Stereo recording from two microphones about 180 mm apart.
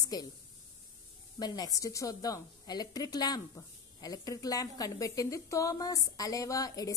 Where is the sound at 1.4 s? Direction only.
20° left (ahead or behind).